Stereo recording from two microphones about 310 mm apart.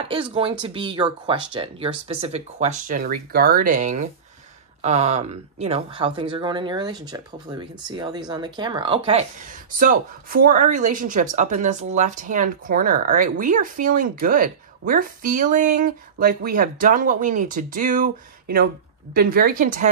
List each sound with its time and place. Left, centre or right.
0.0 s speech: centre